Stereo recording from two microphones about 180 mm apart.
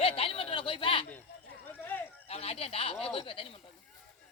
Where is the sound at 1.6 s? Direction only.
10° left (ahead or behind).